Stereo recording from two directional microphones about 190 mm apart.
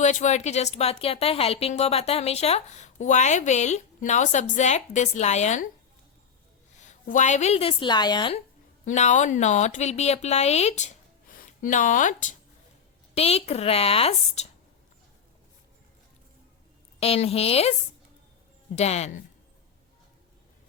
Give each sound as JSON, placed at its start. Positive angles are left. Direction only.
{"t": 0.0, "sound": "a woman's voice", "side_deg": 40}
{"t": 6.7, "sound": "a woman's voice", "side_deg": 40}
{"t": 8.8, "sound": "a woman's voice", "side_deg": 40}
{"t": 17.0, "sound": "a woman's voice", "side_deg": 30}
{"t": 18.8, "sound": "a woman's voice", "side_deg": 35}